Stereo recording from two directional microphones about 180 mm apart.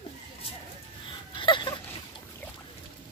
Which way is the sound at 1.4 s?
25° left (ahead or behind).